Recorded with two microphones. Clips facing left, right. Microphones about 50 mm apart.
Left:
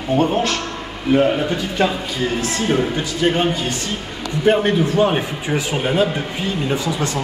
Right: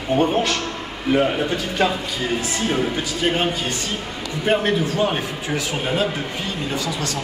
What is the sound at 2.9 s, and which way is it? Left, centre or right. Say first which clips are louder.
Speech: left 3 dB; centre.